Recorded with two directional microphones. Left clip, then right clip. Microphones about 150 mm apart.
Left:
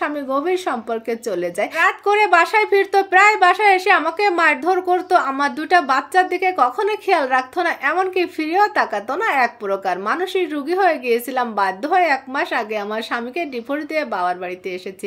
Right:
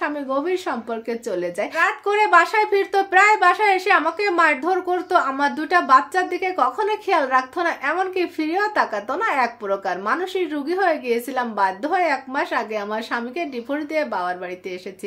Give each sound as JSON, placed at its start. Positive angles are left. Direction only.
{"t": 0.0, "sound": "a woman's voice", "side_deg": 25}